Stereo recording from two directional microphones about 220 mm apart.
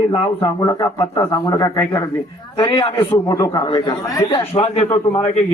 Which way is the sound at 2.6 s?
25° left (ahead or behind).